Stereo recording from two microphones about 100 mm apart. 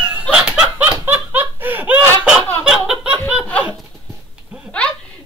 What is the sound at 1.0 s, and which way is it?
Laughter, 20° right (ahead or behind).